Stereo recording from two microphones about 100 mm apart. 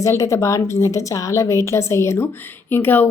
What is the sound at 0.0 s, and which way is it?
Speech, 30° left (ahead or behind).